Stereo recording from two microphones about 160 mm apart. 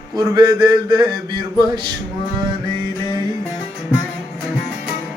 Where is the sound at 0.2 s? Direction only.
25° right (ahead or behind).